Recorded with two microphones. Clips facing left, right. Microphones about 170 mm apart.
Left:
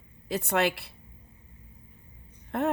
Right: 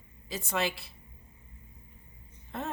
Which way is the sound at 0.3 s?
65° left (ahead or behind).